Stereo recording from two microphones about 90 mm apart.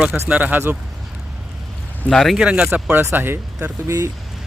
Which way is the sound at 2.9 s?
25° right (ahead or behind).